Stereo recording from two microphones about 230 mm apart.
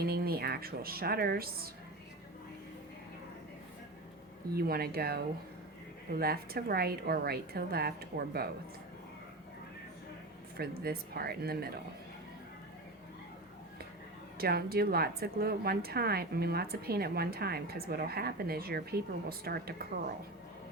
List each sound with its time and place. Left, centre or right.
0.0 s a woman's voice: right
4.5 s a woman's voice: right
10.6 s a woman's voice: right
14.3 s a woman's voice: right